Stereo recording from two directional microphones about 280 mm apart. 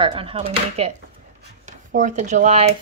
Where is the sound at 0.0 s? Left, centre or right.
Centre.